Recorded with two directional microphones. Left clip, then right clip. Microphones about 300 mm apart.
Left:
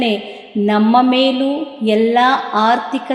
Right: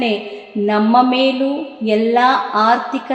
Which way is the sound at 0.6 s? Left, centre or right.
Left.